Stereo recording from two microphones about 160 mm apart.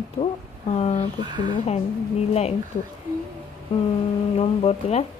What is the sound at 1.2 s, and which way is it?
Speech, 30° right (ahead or behind).